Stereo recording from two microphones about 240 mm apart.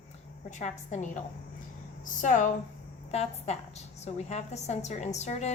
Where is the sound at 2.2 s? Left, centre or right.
Left.